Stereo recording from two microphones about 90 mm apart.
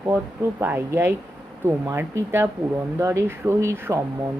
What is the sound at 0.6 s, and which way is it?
Speech, 25° right (ahead or behind).